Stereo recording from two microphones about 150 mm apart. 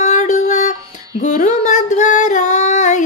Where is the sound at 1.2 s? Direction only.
55° left (ahead or behind).